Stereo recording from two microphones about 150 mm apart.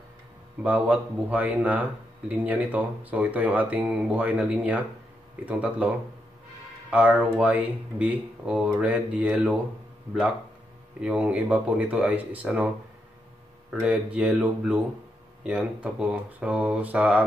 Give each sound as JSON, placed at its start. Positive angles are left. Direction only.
{"t": 0.6, "sound": "speech", "side_deg": -10}
{"t": 11.0, "sound": "speech", "side_deg": -10}
{"t": 13.8, "sound": "speech", "side_deg": -10}